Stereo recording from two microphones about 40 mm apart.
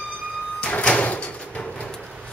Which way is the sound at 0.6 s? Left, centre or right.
Left.